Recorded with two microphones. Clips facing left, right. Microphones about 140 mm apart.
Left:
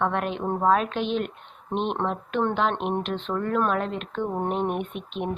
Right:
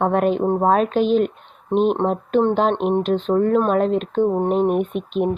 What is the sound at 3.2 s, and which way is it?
Speech, 40° right (ahead or behind).